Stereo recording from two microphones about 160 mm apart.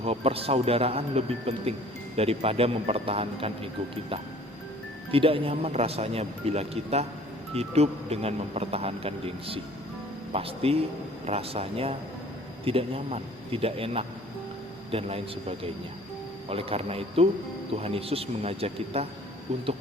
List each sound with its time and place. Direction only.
0.0 s speech: 40° right (ahead or behind)
5.1 s speech: 35° right (ahead or behind)